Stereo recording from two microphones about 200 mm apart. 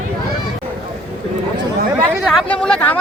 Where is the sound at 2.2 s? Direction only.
Centre (ahead or behind).